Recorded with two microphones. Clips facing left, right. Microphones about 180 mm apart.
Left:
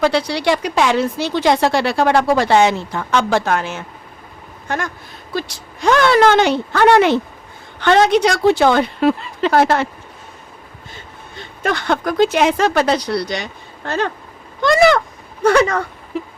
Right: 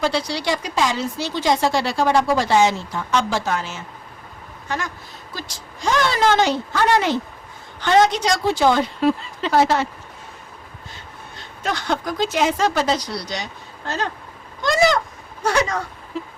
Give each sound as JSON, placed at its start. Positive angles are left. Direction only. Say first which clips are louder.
{"t": 0.0, "sound": "speech", "louder": "left 6 dB", "side_deg": 60}
{"t": 5.3, "sound": "speech", "louder": "left 11 dB", "side_deg": 60}
{"t": 11.6, "sound": "speech", "louder": "left 5 dB", "side_deg": 60}